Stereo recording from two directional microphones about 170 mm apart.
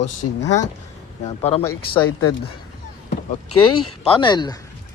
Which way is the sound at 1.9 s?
30° left (ahead or behind).